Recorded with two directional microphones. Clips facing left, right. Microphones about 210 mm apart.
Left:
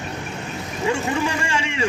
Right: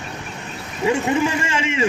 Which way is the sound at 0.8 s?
20° right (ahead or behind).